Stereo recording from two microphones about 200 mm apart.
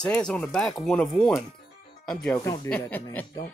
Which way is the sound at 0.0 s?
5° left (ahead or behind).